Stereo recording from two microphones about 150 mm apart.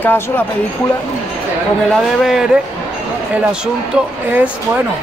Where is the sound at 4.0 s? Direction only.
10° right (ahead or behind).